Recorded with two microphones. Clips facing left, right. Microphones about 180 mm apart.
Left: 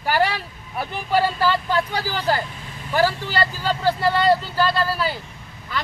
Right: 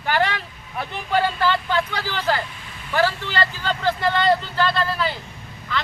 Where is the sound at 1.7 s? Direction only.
40° left (ahead or behind).